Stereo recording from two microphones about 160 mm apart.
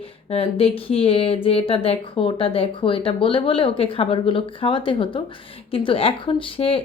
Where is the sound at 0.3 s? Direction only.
35° left (ahead or behind).